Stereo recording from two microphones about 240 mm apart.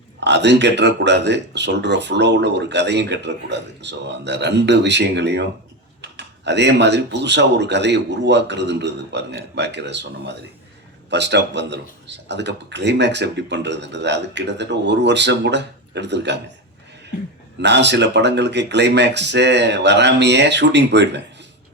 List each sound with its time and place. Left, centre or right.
0.3 s speech: right
17.6 s speech: right